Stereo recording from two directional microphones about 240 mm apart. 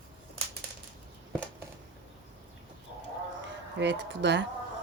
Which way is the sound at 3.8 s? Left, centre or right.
Right.